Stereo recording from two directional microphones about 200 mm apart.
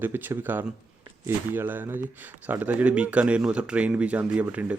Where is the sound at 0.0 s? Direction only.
10° right (ahead or behind).